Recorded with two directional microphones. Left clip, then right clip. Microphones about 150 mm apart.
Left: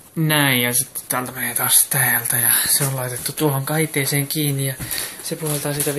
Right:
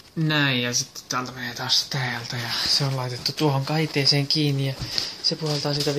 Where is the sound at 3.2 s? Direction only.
15° right (ahead or behind).